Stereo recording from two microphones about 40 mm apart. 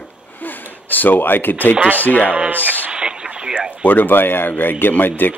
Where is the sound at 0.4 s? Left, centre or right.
Left.